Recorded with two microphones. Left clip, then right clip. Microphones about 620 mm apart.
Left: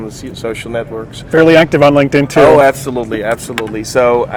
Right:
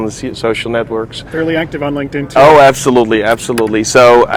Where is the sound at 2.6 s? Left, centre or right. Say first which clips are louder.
Right 4 dB; right.